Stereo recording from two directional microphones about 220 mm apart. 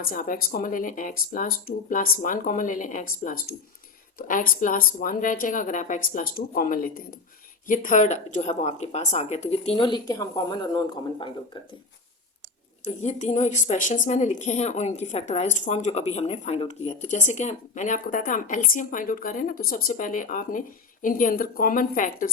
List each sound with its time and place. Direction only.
0.0 s a woman's voice: 40° left (ahead or behind); by 11.7 s 20° left (ahead or behind)
12.8 s a woman's voice: 30° left (ahead or behind)